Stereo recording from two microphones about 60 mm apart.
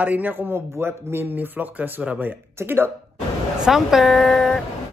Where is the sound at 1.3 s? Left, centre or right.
Right.